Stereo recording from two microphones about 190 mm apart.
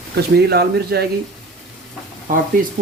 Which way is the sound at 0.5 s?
60° right (ahead or behind).